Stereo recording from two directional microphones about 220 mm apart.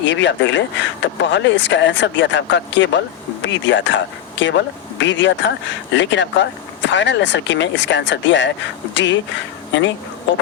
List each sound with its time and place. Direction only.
0.0 s speech: 55° left (ahead or behind)